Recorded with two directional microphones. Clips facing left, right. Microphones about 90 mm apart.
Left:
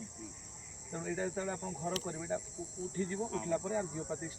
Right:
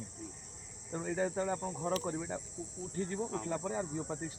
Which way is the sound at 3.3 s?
40° right (ahead or behind).